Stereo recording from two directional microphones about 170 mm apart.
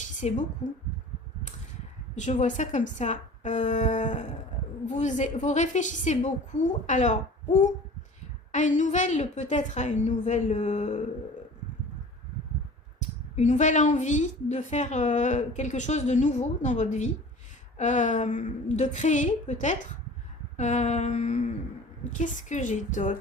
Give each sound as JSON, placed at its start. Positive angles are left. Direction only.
{"t": 0.0, "sound": "a woman's voice", "side_deg": 45}
{"t": 2.1, "sound": "a woman's voice", "side_deg": 45}
{"t": 13.0, "sound": "a woman's voice", "side_deg": 45}